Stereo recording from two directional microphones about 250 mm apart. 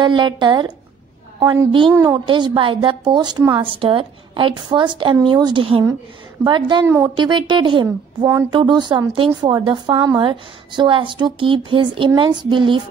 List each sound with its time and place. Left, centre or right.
0.0 s a woman's voice: centre